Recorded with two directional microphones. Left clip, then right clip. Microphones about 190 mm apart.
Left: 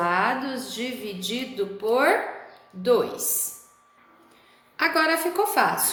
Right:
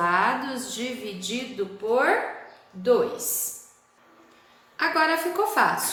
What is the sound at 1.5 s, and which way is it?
Speech, 30° left (ahead or behind).